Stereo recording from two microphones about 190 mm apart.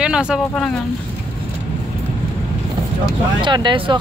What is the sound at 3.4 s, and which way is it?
Speech, 25° right (ahead or behind).